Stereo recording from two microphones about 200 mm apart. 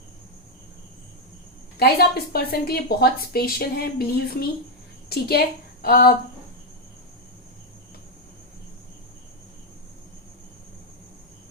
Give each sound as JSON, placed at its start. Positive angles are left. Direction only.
{"t": 1.8, "sound": "a woman's voice", "side_deg": 50}